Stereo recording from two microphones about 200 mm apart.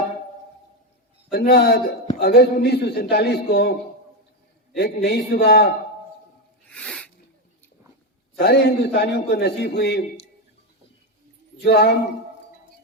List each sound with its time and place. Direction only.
1.3 s a man's voice: 55° left (ahead or behind)
5.0 s a man's voice: 50° left (ahead or behind)
6.7 s sneeze: 5° left (ahead or behind)
8.4 s a man's voice: 55° left (ahead or behind)
11.6 s a man's voice: 55° left (ahead or behind)